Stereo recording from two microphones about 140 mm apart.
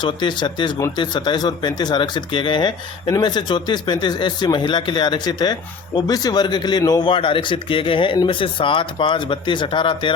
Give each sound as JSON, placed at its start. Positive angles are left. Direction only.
{"t": 0.0, "sound": "speech", "side_deg": 35}